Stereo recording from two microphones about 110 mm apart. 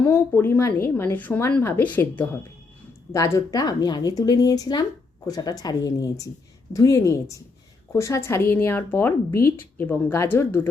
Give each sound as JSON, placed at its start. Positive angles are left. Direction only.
{"t": 0.0, "sound": "a woman's voice", "side_deg": 20}
{"t": 3.1, "sound": "a woman's voice", "side_deg": 25}